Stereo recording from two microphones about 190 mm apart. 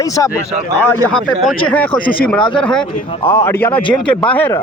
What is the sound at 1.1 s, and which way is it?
A man's voice, 5° left (ahead or behind).